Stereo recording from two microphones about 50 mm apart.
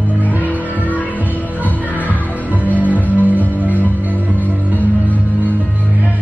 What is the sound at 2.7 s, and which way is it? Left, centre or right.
Music, right.